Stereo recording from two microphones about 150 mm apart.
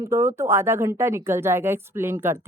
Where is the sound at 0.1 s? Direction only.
20° right (ahead or behind).